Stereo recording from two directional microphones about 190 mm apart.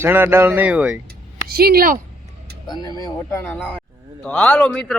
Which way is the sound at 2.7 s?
20° left (ahead or behind).